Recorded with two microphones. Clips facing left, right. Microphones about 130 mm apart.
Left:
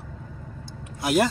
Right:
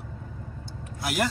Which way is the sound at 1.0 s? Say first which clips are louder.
Left 6 dB; 25° left (ahead or behind).